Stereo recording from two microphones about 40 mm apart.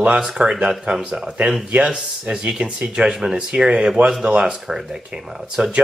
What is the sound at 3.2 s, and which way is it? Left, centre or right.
Speech, centre.